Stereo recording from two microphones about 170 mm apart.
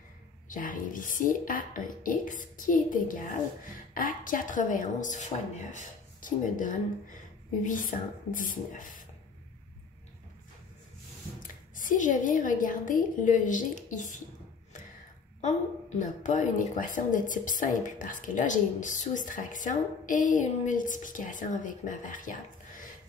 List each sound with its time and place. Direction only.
0.5 s a woman's voice: 55° left (ahead or behind)
11.4 s a woman's voice: 50° left (ahead or behind)
16.0 s a woman's voice: 45° left (ahead or behind)